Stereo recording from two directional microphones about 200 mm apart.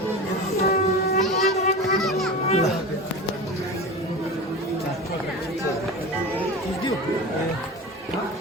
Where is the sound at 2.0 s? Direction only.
Centre (ahead or behind).